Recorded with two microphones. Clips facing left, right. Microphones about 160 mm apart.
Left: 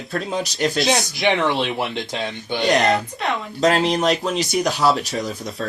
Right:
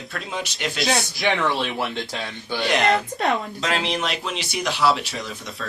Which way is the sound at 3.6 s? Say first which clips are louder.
Left 7 dB; 40° left (ahead or behind).